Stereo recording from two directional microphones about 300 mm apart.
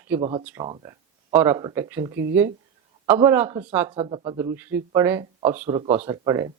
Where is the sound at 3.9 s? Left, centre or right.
Centre.